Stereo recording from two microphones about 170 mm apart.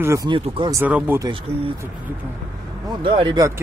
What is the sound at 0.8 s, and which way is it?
Speech, 10° right (ahead or behind).